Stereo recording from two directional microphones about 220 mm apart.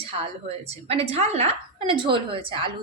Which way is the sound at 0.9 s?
25° right (ahead or behind).